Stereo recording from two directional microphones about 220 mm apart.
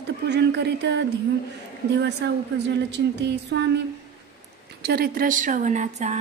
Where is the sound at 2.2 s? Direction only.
50° right (ahead or behind).